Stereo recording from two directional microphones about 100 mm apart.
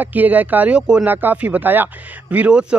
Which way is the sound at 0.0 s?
15° right (ahead or behind).